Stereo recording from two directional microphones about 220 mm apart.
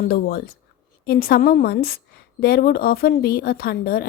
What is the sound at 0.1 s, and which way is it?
A woman's voice, 45° left (ahead or behind).